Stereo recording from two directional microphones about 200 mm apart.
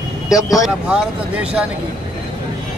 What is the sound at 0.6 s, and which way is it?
Speech, 5° right (ahead or behind).